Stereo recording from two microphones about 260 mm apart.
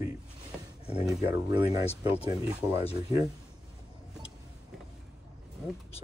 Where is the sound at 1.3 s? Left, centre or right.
Centre.